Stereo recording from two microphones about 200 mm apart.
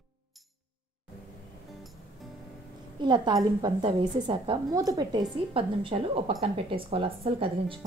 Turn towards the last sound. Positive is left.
turn(degrees=-25)  # may be behind; listen again after turning